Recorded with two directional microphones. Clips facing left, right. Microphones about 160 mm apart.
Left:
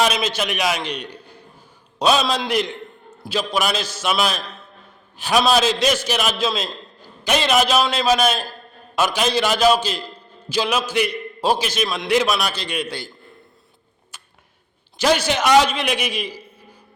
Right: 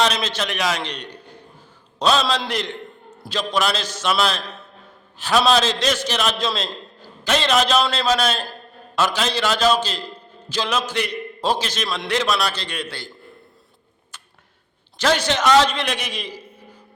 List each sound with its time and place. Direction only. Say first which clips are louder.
0.0 s a man's voice: left 1 dB; 10° left (ahead or behind)
14.1 s a sound: even; 10° left (ahead or behind)
14.9 s a man's voice: left 1 dB; 10° left (ahead or behind)